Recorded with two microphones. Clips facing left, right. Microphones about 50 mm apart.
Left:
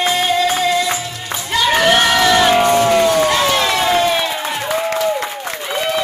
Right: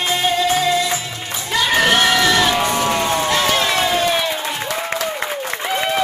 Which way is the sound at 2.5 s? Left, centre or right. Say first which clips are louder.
Left 6 dB; left.